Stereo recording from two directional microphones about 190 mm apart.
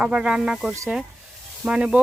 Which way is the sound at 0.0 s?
5° right (ahead or behind).